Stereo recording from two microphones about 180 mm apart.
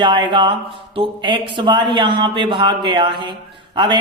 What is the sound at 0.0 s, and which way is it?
Speech, 25° right (ahead or behind).